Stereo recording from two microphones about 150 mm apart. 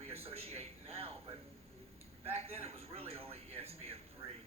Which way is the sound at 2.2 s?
45° right (ahead or behind).